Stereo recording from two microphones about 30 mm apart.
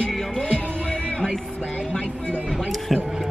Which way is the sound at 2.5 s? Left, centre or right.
Centre.